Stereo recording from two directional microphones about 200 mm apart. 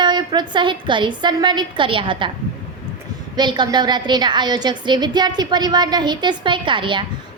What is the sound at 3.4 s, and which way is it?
A woman's voice, 20° right (ahead or behind).